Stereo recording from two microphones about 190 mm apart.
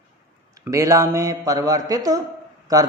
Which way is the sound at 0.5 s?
15° right (ahead or behind).